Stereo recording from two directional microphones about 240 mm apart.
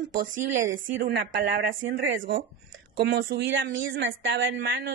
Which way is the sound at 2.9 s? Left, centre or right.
Right.